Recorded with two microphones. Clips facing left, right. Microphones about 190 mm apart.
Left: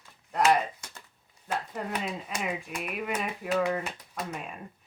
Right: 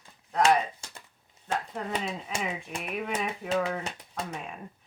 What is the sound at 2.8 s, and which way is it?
Speech, centre (ahead or behind).